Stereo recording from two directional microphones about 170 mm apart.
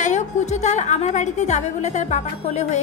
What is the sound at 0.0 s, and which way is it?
A woman's voice, 45° left (ahead or behind).